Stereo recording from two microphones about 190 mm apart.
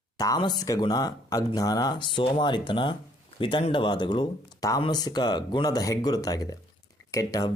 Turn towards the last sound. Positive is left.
turn(degrees=15)  # may be behind; listen again after turning